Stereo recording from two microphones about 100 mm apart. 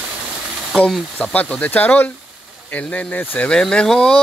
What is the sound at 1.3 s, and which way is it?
Speech, 15° left (ahead or behind).